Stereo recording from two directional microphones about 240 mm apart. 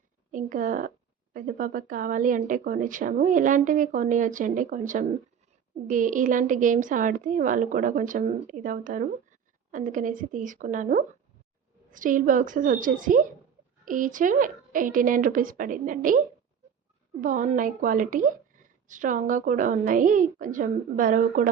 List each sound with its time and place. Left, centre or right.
0.3 s speech: right